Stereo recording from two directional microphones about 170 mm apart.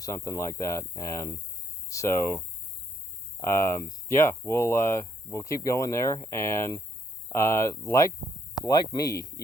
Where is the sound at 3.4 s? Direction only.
15° left (ahead or behind).